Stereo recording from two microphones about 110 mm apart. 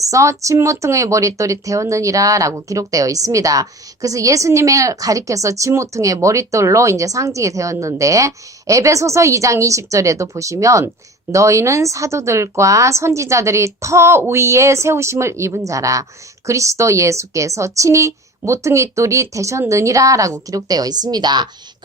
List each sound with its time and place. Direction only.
0.0 s speech: 30° right (ahead or behind)